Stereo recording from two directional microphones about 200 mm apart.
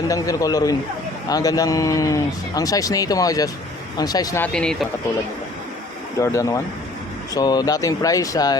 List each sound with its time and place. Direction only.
0.1 s speech: 15° left (ahead or behind)
6.1 s speech: 15° left (ahead or behind)